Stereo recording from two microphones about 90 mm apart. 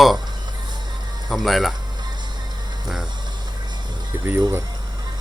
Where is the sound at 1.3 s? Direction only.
Centre (ahead or behind).